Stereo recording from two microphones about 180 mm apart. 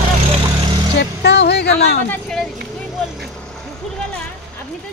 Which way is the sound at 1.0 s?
70° left (ahead or behind).